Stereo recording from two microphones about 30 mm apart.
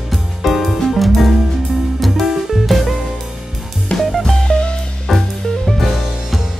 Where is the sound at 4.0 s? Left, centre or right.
Centre.